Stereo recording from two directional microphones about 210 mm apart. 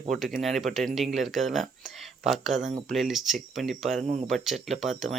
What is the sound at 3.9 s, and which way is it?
Speech, 30° right (ahead or behind).